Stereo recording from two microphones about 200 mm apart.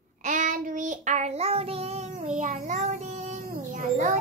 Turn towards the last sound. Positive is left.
turn(degrees=-40)  # may be behind; listen again after turning